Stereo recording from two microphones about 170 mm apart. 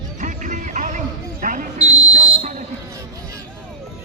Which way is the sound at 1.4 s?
50° right (ahead or behind).